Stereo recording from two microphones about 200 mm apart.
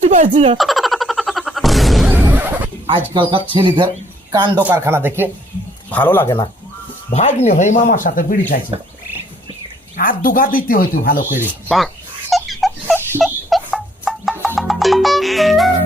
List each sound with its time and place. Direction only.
0.0 s speech: 35° right (ahead or behind)
0.5 s a sound: centre (ahead or behind)
3.5 s speech: 25° right (ahead or behind)
4.6 s speech: 10° right (ahead or behind)
5.9 s speech: 10° left (ahead or behind)
7.1 s speech: 35° left (ahead or behind)
10.0 s speech: 45° left (ahead or behind)
11.3 s speech: centre (ahead or behind)
12.3 s a sound: centre (ahead or behind)
14.5 s music: centre (ahead or behind)